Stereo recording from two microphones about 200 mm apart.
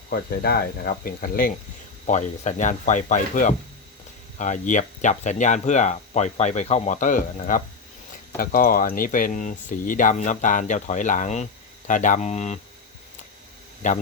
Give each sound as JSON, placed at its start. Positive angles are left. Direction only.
{"t": 0.1, "sound": "speech", "side_deg": 50}
{"t": 13.8, "sound": "speech", "side_deg": 40}